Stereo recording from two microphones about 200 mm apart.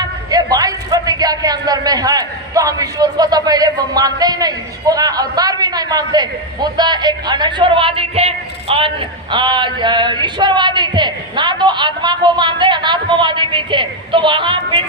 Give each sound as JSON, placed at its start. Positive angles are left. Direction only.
{"t": 0.0, "sound": "a man's voice", "side_deg": -20}